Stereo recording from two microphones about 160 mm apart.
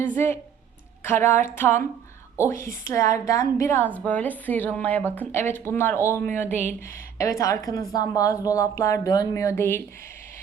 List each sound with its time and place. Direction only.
0.0 s a woman's voice: 15° left (ahead or behind)